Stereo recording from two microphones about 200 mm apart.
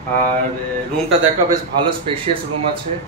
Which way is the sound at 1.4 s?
25° right (ahead or behind).